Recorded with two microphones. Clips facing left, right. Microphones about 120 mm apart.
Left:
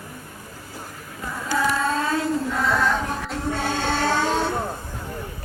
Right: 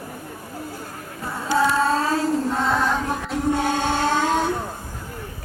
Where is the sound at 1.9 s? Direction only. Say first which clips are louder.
Right 2 dB; 35° right (ahead or behind).